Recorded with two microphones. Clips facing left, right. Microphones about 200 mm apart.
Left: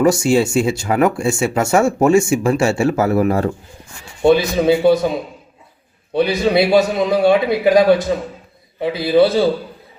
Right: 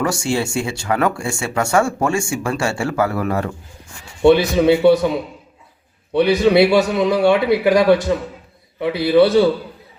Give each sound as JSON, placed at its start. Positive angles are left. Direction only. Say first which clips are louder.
{"t": 0.0, "sound": "speech", "louder": "left 6 dB", "side_deg": 20}
{"t": 4.2, "sound": "a man's voice", "louder": "right 1 dB", "side_deg": -70}
{"t": 6.1, "sound": "a man's voice", "louder": "right 2 dB", "side_deg": -65}